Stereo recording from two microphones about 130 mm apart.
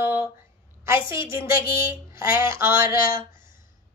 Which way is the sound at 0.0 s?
15° right (ahead or behind).